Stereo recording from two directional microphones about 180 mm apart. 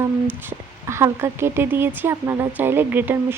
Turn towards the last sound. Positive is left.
turn(degrees=-10)  # may be behind; listen again after turning